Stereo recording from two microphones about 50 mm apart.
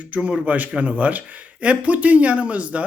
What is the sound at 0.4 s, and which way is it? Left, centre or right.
Speech, right.